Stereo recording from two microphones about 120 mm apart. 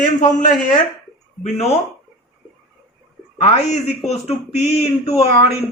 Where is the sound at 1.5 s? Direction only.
60° left (ahead or behind).